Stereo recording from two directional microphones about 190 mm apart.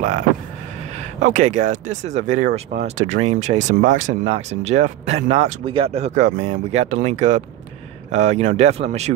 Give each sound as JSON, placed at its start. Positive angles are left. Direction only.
{"t": 0.9, "sound": "speech", "side_deg": -40}